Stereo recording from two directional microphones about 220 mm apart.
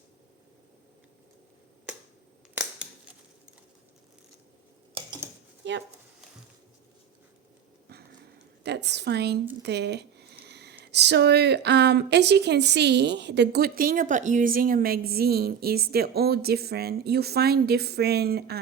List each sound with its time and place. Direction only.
5.6 s speech: 55° right (ahead or behind)
8.6 s a woman's voice: 50° right (ahead or behind)